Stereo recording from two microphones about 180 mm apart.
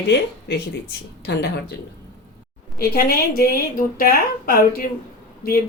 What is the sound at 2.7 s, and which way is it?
A woman's voice, 55° left (ahead or behind).